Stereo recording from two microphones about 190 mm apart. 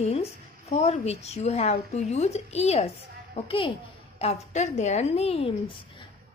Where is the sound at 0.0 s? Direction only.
35° left (ahead or behind).